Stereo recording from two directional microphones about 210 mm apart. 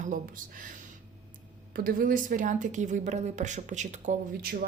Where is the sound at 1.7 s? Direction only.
40° right (ahead or behind).